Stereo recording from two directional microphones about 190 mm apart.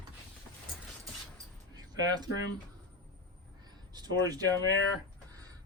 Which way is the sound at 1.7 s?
20° right (ahead or behind).